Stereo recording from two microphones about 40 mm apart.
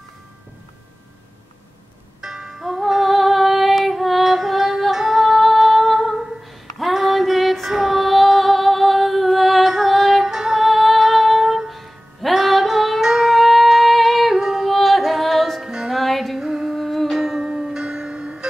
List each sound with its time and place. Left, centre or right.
2.2 s music: centre
2.6 s female singing: centre
7.7 s music: centre
10.6 s music: centre
14.4 s yodeling: centre
14.7 s music: centre
15.6 s music: centre
15.9 s music: centre
16.3 s music: centre
16.7 s music: centre
17.2 s music: centre